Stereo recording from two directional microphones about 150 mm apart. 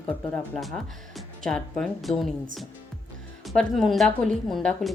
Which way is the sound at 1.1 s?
5° left (ahead or behind).